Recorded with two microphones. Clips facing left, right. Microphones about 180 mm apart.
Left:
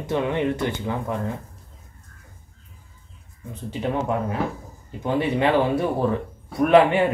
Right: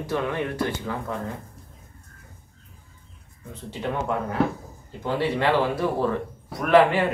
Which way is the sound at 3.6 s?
15° left (ahead or behind).